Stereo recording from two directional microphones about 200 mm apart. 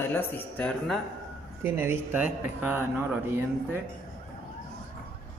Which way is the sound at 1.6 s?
10° right (ahead or behind).